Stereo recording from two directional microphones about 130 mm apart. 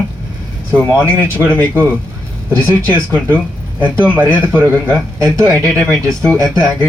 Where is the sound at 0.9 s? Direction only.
15° right (ahead or behind).